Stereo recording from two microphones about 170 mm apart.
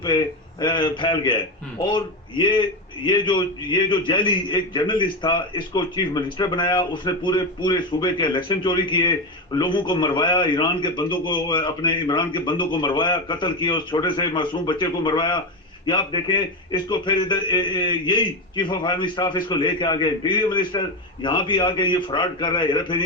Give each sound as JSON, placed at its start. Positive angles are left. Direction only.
{"t": 0.6, "sound": "a man's voice", "side_deg": 25}
{"t": 2.4, "sound": "a man's voice", "side_deg": 25}